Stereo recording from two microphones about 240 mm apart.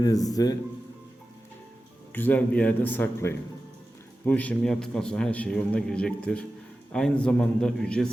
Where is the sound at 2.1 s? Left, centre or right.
Centre.